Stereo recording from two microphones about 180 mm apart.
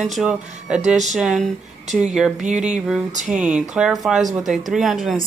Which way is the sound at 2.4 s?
40° right (ahead or behind).